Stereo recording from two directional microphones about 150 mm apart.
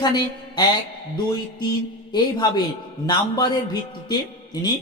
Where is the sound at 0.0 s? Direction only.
30° left (ahead or behind).